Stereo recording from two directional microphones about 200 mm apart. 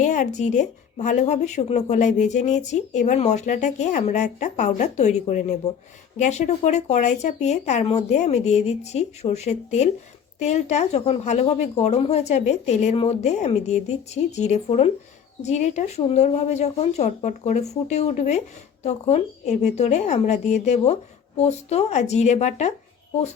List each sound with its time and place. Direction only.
0.0 s speech: 40° left (ahead or behind)